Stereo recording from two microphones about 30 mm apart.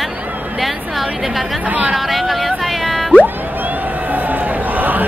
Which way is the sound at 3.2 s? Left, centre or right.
Right.